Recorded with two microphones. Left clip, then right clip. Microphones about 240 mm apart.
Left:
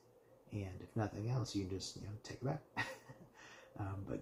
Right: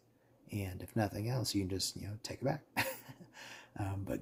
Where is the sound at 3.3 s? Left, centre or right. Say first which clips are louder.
Right 7 dB; right.